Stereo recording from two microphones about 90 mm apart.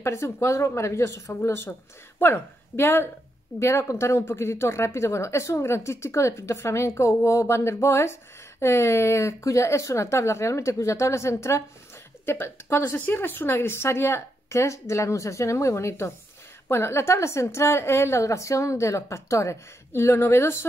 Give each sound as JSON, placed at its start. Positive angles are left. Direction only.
{"t": 0.0, "sound": "a woman's voice", "side_deg": 30}